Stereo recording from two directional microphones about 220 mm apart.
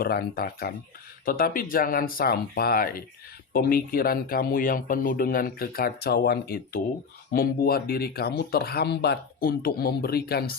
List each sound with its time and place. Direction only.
0.0 s speech: 45° left (ahead or behind)